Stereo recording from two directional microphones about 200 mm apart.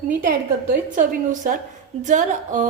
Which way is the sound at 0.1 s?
50° right (ahead or behind).